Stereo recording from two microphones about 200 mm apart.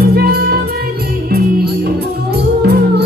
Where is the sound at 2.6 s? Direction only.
55° right (ahead or behind).